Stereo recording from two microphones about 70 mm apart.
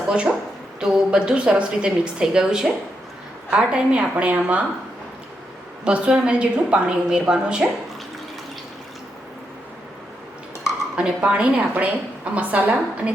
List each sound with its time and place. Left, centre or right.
0.1 s a woman's voice: centre
5.8 s a woman's voice: centre
10.9 s a woman's voice: centre